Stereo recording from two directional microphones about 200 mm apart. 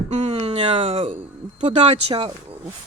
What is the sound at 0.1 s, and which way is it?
Speech, 35° right (ahead or behind).